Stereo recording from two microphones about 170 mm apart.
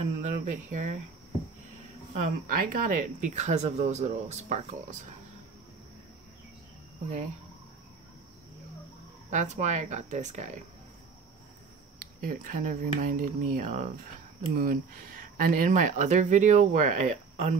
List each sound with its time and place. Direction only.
0.0 s speech: 45° right (ahead or behind)
2.1 s speech: 50° right (ahead or behind)
9.3 s speech: 45° right (ahead or behind)
12.0 s speech: 55° right (ahead or behind)